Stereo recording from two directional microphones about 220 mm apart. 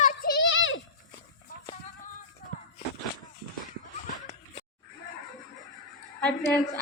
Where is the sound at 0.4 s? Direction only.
60° left (ahead or behind).